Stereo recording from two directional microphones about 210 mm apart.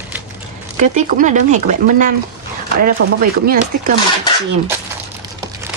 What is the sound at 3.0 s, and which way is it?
Chopping, 70° right (ahead or behind).